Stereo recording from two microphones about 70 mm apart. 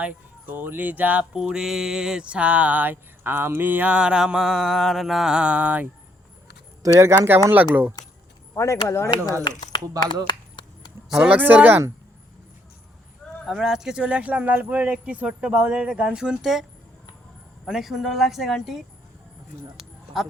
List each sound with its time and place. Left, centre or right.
0.0 s speech: right
1.3 s speech: centre; by 3.8 s right
3.8 s speech: centre
6.8 s speech: right
7.5 s speech: right
8.5 s speech: left
9.4 s speech: left
10.2 s a sound: left
11.1 s speech: centre
11.3 s speech: right
13.4 s speech: centre
17.7 s speech: centre
20.1 s speech: centre